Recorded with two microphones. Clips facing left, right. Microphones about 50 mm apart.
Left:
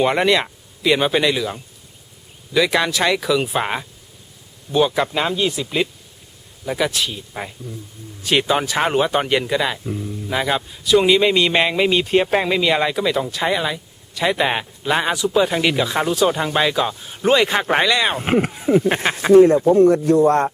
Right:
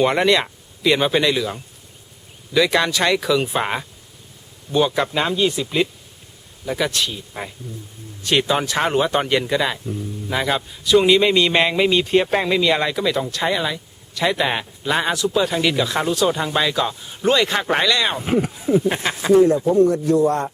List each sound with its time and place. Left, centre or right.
0.0 s speech: centre
18.2 s speech: left
18.5 s a man's voice: left